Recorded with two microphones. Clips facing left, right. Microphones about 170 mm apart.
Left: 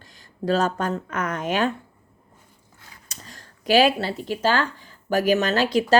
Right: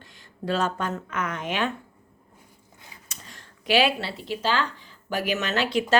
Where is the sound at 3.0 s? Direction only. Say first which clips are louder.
Left 5 dB; 40° left (ahead or behind).